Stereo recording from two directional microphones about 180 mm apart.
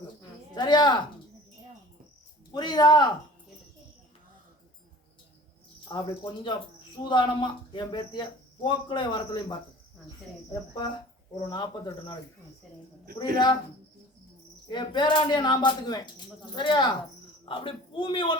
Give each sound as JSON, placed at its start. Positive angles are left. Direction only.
{"t": 0.5, "sound": "speech", "side_deg": 25}
{"t": 2.5, "sound": "speech", "side_deg": 25}
{"t": 5.9, "sound": "speech", "side_deg": 25}
{"t": 14.7, "sound": "speech", "side_deg": 25}